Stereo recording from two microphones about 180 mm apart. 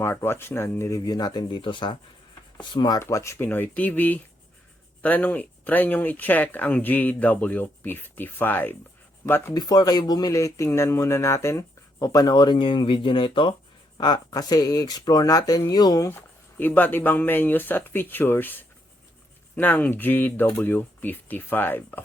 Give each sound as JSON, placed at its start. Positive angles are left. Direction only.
{"t": 0.0, "sound": "speech", "side_deg": 15}